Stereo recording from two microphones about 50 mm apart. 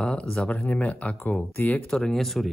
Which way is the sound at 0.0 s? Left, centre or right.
Centre.